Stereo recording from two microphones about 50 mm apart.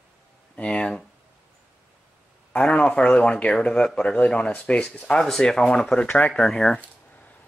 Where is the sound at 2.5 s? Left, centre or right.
Centre.